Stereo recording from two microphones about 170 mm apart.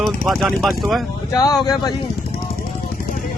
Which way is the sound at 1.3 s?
25° left (ahead or behind).